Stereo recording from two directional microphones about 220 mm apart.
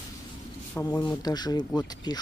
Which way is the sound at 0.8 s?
15° left (ahead or behind).